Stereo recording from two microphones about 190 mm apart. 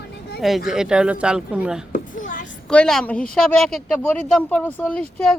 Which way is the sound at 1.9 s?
45° left (ahead or behind).